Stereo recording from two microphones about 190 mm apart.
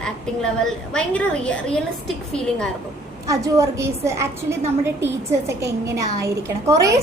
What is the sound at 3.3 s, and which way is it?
A woman's voice, 15° right (ahead or behind).